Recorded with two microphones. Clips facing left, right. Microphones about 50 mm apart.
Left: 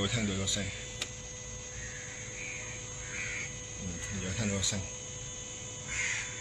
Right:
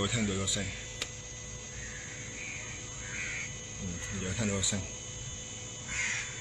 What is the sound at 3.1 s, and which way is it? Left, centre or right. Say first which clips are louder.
Quack: even; centre.